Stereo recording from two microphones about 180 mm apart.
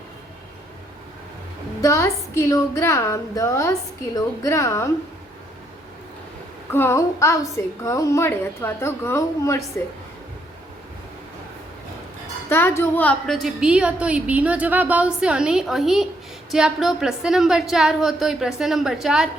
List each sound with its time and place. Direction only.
1.8 s a woman's voice: 15° left (ahead or behind)
6.7 s a woman's voice: 15° left (ahead or behind)
12.5 s a woman's voice: 10° left (ahead or behind); by 19.3 s 5° right (ahead or behind)